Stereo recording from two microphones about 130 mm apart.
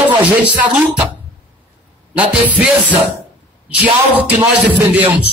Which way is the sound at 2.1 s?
10° right (ahead or behind).